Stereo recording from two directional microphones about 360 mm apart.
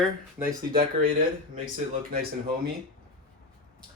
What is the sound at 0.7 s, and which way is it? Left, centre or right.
Speech, right.